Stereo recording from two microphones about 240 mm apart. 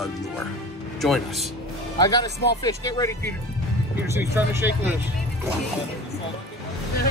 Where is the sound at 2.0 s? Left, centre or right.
Centre.